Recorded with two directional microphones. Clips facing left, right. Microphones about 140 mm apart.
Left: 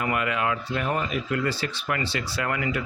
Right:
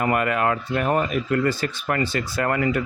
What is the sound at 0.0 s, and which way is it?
Speech, 45° right (ahead or behind).